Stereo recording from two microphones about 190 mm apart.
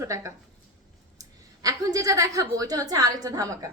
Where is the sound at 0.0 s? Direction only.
15° right (ahead or behind).